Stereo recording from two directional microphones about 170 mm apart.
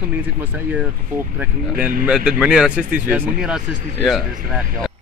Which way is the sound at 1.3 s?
10° right (ahead or behind).